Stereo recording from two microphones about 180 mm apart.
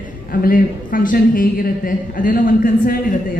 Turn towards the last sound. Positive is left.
turn(degrees=50)  # may be behind; listen again after turning